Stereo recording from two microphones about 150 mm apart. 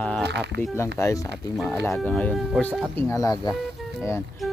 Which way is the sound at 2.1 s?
5° left (ahead or behind).